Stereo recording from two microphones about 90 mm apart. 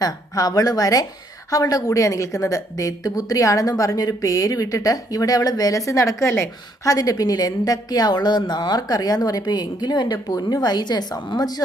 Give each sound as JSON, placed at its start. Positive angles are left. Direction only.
{"t": 0.0, "sound": "a woman's voice", "side_deg": 40}